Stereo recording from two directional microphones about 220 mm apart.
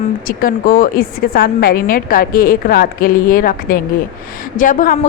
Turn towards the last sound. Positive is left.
turn(degrees=35)  # may be behind; listen again after turning